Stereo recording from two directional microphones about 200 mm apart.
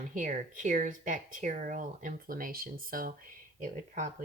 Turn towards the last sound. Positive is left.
turn(degrees=-40)  # may be behind; listen again after turning